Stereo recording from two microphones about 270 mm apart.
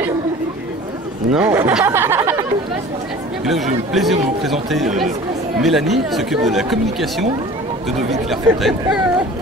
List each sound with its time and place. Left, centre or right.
1.3 s speech: centre
3.9 s speech: centre